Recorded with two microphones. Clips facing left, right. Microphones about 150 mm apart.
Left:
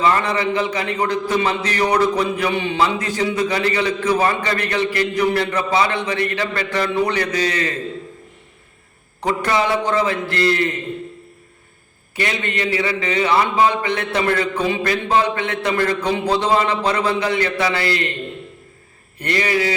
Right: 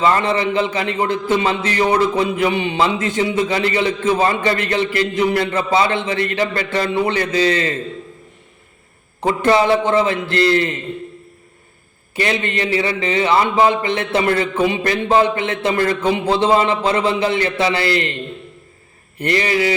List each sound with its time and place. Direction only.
0.0 s a man's voice: 25° right (ahead or behind)
9.2 s a man's voice: 30° right (ahead or behind)
12.1 s a man's voice: 30° right (ahead or behind)
19.2 s a man's voice: 25° right (ahead or behind)